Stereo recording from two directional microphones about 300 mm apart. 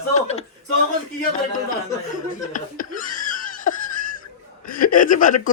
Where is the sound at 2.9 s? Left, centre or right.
Left.